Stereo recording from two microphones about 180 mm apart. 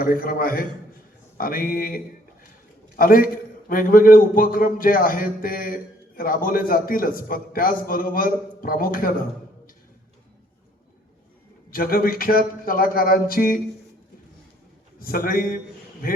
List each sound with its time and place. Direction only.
0.0 s a man's voice: 55° left (ahead or behind)
11.7 s a man's voice: 55° left (ahead or behind)
14.9 s a man's voice: 50° left (ahead or behind)